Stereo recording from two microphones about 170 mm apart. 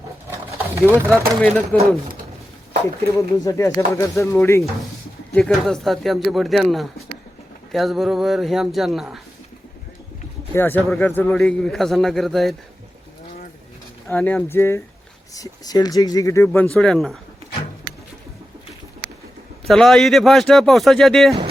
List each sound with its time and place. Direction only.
0.9 s speech: 15° right (ahead or behind)
1.4 s speech: 10° left (ahead or behind)
3.4 s speech: 20° left (ahead or behind)
5.3 s speech: centre (ahead or behind)
10.5 s speech: 10° left (ahead or behind)
14.1 s speech: 10° left (ahead or behind)
16.5 s speech: 5° left (ahead or behind)
19.6 s speech: centre (ahead or behind)